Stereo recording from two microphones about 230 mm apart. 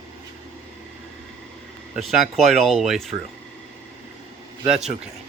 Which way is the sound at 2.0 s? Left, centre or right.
Centre.